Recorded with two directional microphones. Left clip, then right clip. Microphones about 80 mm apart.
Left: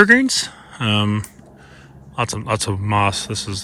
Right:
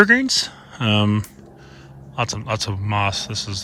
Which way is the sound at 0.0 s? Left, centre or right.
Right.